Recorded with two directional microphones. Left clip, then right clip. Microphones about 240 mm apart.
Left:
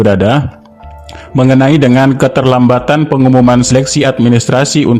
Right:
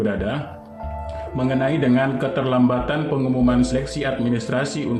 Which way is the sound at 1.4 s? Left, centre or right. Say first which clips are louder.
Left 13 dB; left.